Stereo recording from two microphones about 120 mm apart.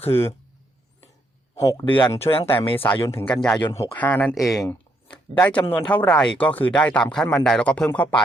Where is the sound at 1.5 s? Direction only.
25° left (ahead or behind).